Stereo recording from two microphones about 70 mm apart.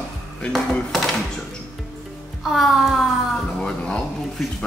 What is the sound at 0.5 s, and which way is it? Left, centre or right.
Dishes, centre.